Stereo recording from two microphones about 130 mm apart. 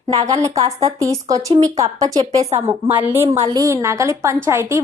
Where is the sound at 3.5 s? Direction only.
25° right (ahead or behind).